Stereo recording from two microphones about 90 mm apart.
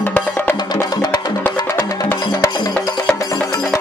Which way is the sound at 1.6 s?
35° left (ahead or behind).